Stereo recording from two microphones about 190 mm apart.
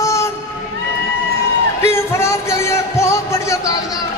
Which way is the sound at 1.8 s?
15° left (ahead or behind).